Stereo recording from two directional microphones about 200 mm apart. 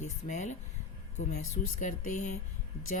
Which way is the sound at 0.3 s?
35° left (ahead or behind).